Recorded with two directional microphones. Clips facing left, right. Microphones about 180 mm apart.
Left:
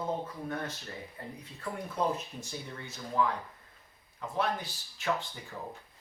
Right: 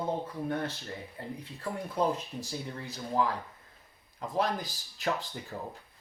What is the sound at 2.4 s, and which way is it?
Speech, 35° right (ahead or behind).